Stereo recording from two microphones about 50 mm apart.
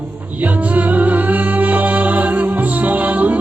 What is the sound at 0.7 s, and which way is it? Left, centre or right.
Music, right.